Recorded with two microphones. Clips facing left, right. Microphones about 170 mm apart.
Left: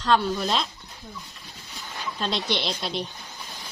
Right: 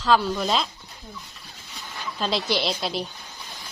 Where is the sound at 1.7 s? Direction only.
Centre (ahead or behind).